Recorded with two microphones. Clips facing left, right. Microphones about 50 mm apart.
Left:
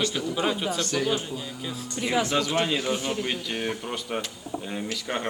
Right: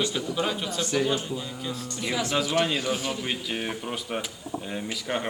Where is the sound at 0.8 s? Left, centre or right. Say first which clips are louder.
Right 1 dB; centre.